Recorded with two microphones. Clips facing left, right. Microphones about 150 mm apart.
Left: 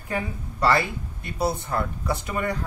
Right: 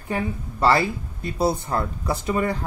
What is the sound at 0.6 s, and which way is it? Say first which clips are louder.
Speech: right 2 dB; 30° right (ahead or behind).